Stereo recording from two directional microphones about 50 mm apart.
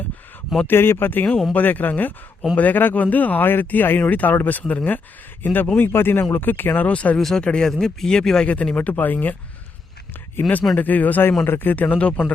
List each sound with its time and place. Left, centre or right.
0.7 s speech: left
6.8 s speech: left
7.2 s speech: centre
8.7 s speech: left
10.4 s speech: left
10.8 s speech: left